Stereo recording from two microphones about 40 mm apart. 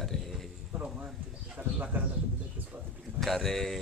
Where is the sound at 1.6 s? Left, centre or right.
Right.